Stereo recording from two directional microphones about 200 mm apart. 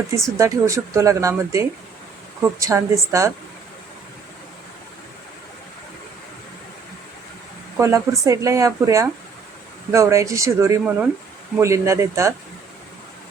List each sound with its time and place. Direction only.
0.2 s speech: 15° right (ahead or behind)
7.8 s speech: 15° right (ahead or behind)